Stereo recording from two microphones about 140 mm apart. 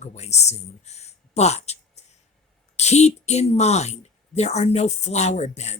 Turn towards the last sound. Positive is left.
turn(degrees=50)  # may be behind; listen again after turning